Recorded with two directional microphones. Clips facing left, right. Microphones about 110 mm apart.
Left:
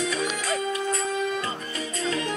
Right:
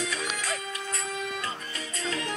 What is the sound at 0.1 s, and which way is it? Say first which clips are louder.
Music: left 6 dB; 20° left (ahead or behind).